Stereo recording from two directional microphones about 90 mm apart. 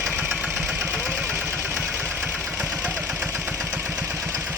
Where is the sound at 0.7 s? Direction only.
20° right (ahead or behind).